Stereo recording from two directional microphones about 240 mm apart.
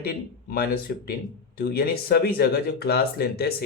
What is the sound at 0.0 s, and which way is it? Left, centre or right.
Speech, left.